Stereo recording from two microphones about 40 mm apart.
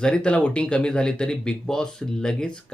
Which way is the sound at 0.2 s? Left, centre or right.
Left.